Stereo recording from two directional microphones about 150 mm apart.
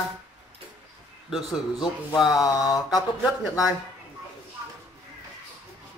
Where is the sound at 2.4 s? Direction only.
25° left (ahead or behind).